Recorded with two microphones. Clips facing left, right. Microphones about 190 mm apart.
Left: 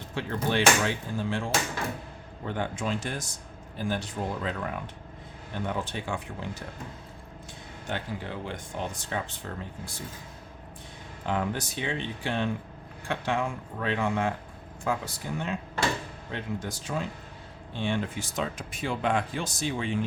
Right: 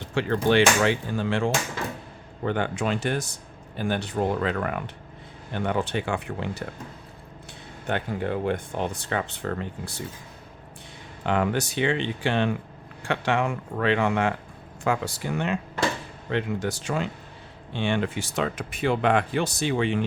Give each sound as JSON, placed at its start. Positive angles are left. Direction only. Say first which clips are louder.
{"t": 0.1, "sound": "speech", "louder": "right 7 dB", "side_deg": -80}
{"t": 7.9, "sound": "speech", "louder": "right 7 dB", "side_deg": -60}
{"t": 11.3, "sound": "speech", "louder": "right 5 dB", "side_deg": -75}